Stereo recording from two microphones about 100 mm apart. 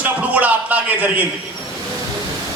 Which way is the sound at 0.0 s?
15° right (ahead or behind).